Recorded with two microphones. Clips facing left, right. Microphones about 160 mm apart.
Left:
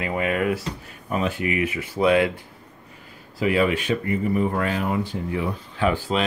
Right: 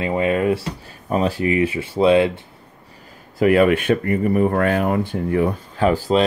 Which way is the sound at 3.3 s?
55° right (ahead or behind).